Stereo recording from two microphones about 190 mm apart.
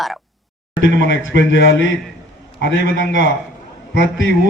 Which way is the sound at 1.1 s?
70° left (ahead or behind).